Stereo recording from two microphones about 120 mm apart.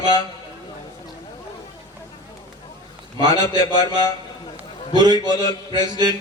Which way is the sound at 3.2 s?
35° right (ahead or behind).